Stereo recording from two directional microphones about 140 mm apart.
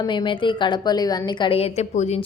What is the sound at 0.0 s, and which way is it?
A woman's voice, 35° left (ahead or behind).